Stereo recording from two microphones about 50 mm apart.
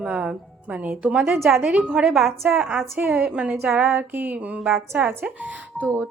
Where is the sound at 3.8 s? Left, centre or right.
Right.